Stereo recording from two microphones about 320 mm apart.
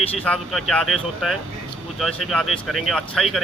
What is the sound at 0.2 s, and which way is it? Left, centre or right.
Speech, centre.